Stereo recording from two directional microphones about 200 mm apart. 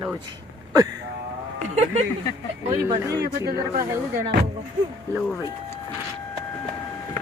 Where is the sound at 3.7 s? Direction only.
45° right (ahead or behind).